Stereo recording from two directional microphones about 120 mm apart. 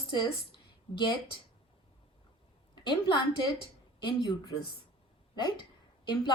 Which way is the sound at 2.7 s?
45° left (ahead or behind).